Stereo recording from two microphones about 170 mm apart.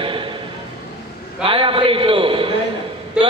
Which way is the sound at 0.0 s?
30° right (ahead or behind).